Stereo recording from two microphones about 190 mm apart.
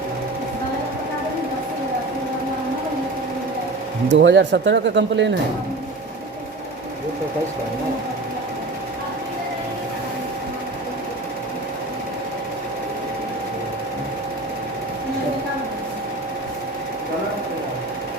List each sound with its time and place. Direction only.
4.1 s speech: 75° right (ahead or behind)